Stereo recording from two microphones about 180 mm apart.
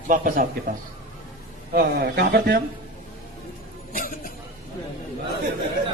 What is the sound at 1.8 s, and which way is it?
Speech, 60° right (ahead or behind).